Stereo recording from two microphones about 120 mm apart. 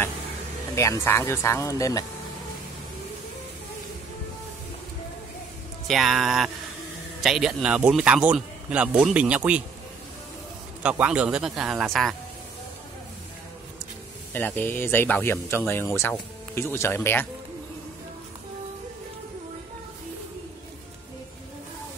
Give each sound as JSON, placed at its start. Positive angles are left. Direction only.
{"t": 0.7, "sound": "speech", "side_deg": 25}
{"t": 5.9, "sound": "a man's voice", "side_deg": 0}
{"t": 10.8, "sound": "speech", "side_deg": -10}
{"t": 14.3, "sound": "speech", "side_deg": 15}